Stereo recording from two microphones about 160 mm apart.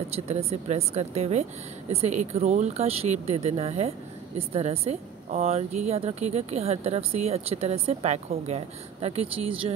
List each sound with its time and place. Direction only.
0.3 s speech: 40° right (ahead or behind)